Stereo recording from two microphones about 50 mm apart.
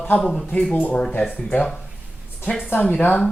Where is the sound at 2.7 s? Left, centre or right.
Left.